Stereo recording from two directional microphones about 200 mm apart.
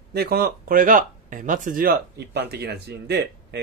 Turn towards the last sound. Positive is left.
turn(degrees=-55)  # may be behind; listen again after turning